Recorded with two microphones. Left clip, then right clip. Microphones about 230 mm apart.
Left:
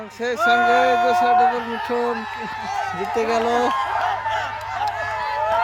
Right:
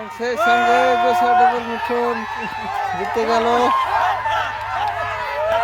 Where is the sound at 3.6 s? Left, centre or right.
Centre.